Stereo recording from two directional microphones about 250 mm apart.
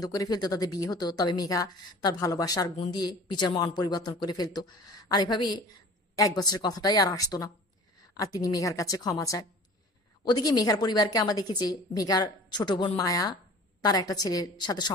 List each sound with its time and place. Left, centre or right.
0.0 s a woman's voice: centre